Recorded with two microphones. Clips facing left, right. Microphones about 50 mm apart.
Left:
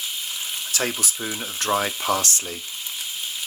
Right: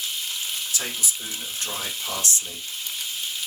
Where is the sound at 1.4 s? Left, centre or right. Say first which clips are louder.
Left 11 dB; left.